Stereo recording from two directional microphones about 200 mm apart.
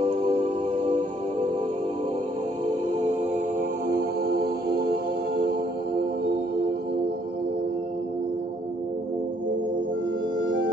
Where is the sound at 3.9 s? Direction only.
50° right (ahead or behind).